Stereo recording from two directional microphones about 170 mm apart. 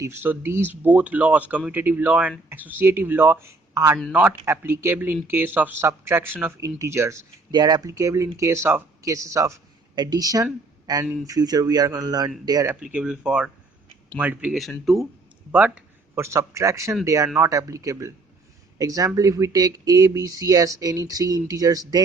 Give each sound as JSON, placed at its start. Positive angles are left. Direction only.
{"t": 0.0, "sound": "speech", "side_deg": -15}
{"t": 12.8, "sound": "speech", "side_deg": -5}